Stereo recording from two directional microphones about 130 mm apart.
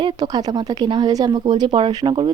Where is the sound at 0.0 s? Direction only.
30° right (ahead or behind).